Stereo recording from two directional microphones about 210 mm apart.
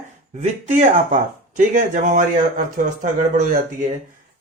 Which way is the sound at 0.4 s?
30° right (ahead or behind).